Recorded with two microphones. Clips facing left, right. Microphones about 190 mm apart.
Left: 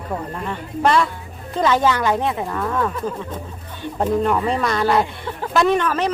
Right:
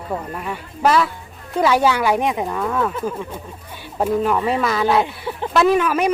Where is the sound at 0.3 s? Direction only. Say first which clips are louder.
Left 2 dB; 10° right (ahead or behind).